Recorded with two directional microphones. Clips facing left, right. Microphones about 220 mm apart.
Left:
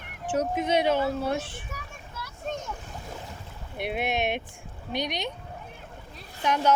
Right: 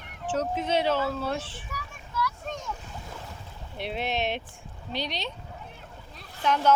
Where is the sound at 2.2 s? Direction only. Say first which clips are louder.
Right 1 dB; 25° left (ahead or behind).